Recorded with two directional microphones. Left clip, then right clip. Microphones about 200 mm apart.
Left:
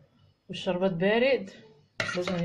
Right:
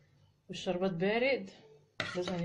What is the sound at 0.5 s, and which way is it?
Speech, 15° right (ahead or behind).